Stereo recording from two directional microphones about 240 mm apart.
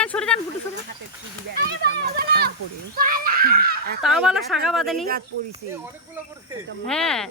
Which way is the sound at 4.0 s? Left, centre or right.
Centre.